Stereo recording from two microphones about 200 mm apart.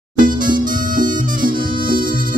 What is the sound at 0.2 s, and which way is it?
Music, 40° right (ahead or behind).